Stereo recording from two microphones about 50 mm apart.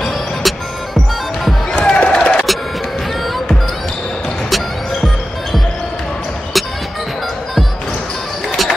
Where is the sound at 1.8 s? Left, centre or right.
Left.